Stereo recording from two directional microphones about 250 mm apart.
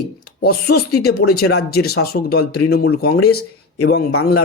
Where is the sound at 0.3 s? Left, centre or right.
Left.